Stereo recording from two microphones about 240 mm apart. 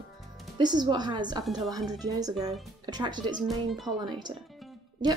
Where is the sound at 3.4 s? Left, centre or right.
Centre.